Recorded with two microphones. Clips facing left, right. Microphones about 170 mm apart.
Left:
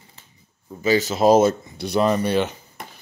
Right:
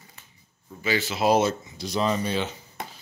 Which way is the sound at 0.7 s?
40° left (ahead or behind).